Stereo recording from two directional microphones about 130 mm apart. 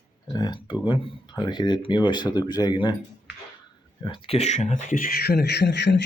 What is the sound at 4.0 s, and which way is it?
Speech, 40° left (ahead or behind).